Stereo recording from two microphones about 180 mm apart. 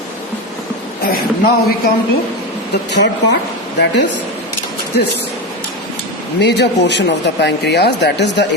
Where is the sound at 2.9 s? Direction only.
70° left (ahead or behind).